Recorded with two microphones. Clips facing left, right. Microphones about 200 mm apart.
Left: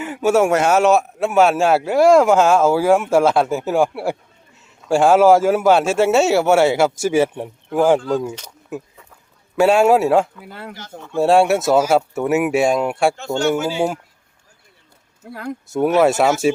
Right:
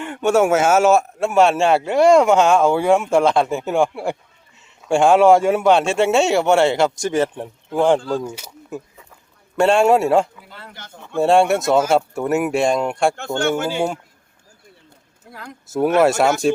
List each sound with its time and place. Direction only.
0.0 s speech: 5° left (ahead or behind)
10.4 s speech: 60° left (ahead or behind)
10.8 s speech: 55° right (ahead or behind)
11.2 s speech: centre (ahead or behind)
13.1 s speech: 55° right (ahead or behind)
13.7 s speech: 5° left (ahead or behind)
15.3 s speech: 55° left (ahead or behind)
15.7 s speech: centre (ahead or behind)